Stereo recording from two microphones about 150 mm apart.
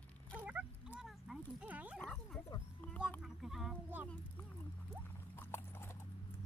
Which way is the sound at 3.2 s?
Centre (ahead or behind).